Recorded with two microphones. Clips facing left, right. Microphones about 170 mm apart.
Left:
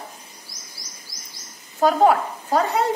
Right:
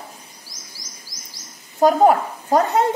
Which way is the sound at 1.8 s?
45° right (ahead or behind).